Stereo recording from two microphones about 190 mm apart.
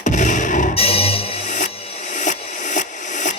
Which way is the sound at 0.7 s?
30° left (ahead or behind).